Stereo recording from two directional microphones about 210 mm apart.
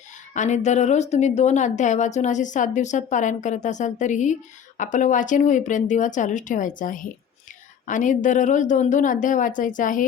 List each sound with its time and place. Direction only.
0.3 s speech: 35° left (ahead or behind)